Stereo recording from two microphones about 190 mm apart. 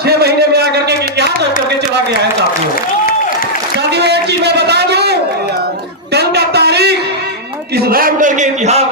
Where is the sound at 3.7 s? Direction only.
60° right (ahead or behind).